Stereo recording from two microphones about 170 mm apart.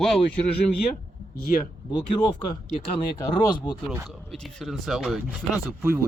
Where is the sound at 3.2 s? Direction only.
25° left (ahead or behind).